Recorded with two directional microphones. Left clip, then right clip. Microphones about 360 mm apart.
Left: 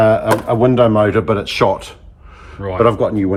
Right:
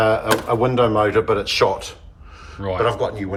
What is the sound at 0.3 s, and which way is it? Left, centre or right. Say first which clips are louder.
Speech: left 5 dB; centre.